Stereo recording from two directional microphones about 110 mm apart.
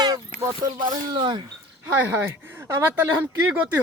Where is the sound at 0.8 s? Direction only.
45° right (ahead or behind).